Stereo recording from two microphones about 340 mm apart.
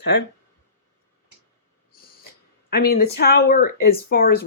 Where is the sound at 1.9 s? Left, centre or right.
Left.